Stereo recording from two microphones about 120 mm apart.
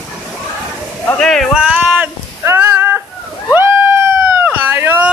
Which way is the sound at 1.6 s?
5° right (ahead or behind).